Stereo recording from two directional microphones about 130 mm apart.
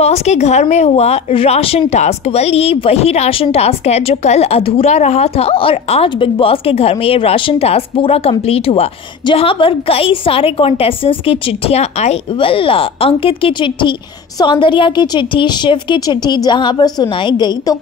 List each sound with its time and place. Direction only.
0.0 s a woman's voice: 55° left (ahead or behind); by 17.7 s 35° left (ahead or behind)